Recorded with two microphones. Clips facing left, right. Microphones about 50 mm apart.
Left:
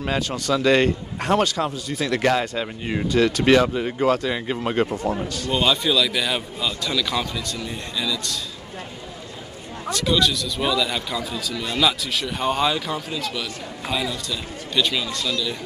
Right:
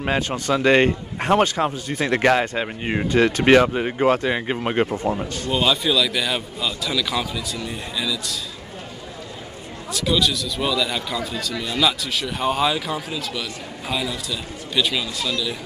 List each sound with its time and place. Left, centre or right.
0.0 s a man's voice: right
5.5 s speech: centre
9.8 s speech: centre